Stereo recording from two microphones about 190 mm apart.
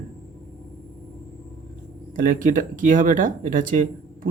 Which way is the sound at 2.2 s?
45° right (ahead or behind).